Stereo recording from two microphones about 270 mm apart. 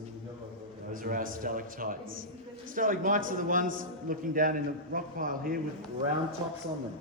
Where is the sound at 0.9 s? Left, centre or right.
Right.